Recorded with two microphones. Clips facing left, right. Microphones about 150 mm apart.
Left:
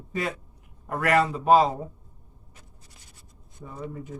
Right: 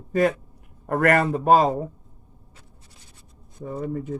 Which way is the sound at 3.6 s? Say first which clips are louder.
Right 8 dB; 50° right (ahead or behind).